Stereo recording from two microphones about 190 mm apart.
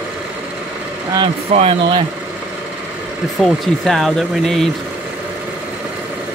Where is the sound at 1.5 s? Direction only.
30° right (ahead or behind).